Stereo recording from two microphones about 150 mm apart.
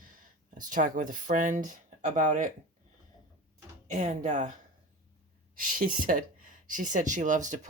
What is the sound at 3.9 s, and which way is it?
Speech, 55° right (ahead or behind).